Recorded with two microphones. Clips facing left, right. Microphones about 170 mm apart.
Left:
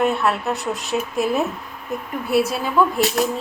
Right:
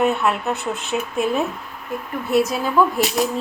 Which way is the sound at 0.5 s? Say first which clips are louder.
Even; 35° left (ahead or behind).